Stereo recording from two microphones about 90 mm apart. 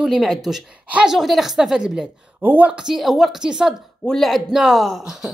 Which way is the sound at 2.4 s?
20° right (ahead or behind).